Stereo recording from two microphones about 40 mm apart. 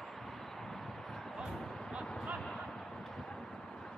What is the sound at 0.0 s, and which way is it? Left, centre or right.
Vehicle, centre.